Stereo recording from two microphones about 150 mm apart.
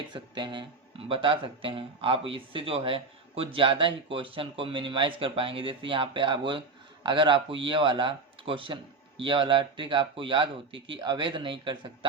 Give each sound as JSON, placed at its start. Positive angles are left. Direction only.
{"t": 0.1, "sound": "speech", "side_deg": -30}